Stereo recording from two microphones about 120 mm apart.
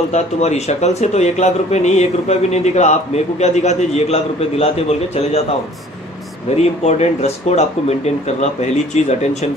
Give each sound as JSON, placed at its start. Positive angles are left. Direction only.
{"t": 0.1, "sound": "speech", "side_deg": 70}
{"t": 6.5, "sound": "speech", "side_deg": 65}